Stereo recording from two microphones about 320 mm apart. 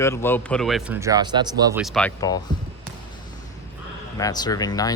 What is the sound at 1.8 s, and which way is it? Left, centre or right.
Speech, centre.